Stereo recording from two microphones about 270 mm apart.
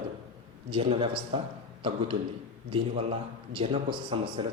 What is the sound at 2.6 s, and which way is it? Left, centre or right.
A man's voice, centre.